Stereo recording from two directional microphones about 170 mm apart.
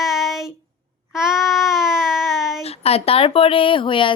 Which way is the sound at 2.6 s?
35° left (ahead or behind).